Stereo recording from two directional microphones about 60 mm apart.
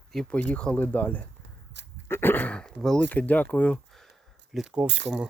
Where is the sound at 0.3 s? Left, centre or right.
Centre.